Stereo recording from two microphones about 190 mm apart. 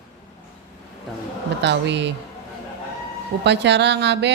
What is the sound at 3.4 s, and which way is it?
Speech, 65° right (ahead or behind).